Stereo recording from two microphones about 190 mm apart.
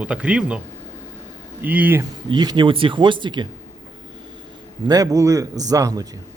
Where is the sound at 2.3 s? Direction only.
25° right (ahead or behind).